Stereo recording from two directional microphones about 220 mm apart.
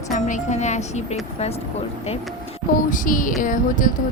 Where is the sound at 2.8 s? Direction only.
35° left (ahead or behind).